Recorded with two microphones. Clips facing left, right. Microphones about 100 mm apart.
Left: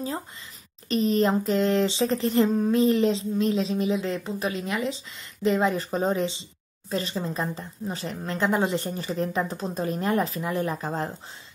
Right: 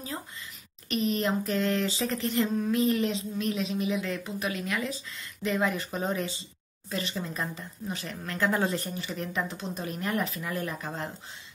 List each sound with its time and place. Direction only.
0.8 s speech: 35° left (ahead or behind)
8.8 s speech: 35° left (ahead or behind)